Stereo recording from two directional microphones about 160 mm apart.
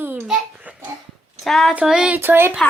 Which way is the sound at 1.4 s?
Centre (ahead or behind).